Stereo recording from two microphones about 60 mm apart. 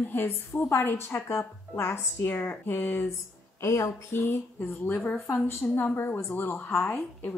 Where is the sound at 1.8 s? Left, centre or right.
Left.